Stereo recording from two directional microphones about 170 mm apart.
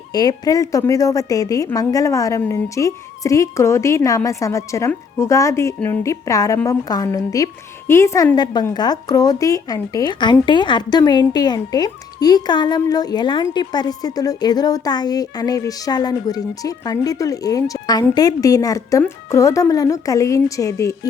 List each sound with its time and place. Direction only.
0.1 s speech: 25° left (ahead or behind)